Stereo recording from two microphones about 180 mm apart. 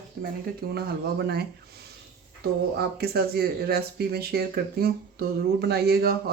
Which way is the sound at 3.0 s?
60° right (ahead or behind).